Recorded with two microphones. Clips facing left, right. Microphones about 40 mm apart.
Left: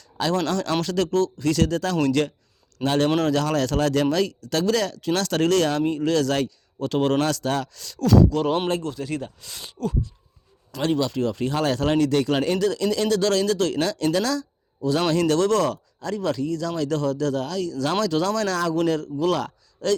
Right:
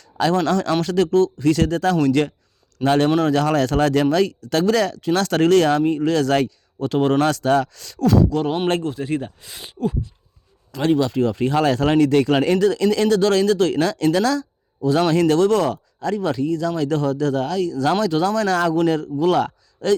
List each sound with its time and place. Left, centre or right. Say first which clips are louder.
0.0 s a sound: right 5 dB; right
0.3 s speech: right 3 dB; right
6.8 s speech: right 3 dB; right
7.2 s speech: right 6 dB; right
7.9 s speech: right 1 dB; right
15.4 s speech: right 3 dB; right
18.0 s speech: right 3 dB; right